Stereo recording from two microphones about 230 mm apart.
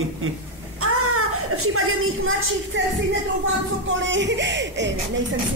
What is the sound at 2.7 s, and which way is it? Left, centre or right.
A man's voice, right.